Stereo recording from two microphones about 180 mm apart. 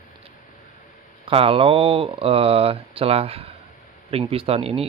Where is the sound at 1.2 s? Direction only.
30° right (ahead or behind).